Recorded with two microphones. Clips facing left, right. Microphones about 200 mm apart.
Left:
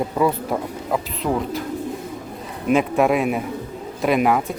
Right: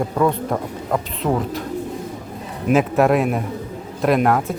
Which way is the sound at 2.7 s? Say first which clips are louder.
Right 2 dB; centre (ahead or behind).